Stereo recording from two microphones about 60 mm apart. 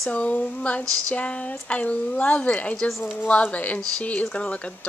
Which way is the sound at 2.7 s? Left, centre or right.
Centre.